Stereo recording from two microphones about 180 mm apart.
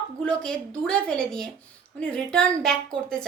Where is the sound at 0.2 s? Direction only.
5° left (ahead or behind).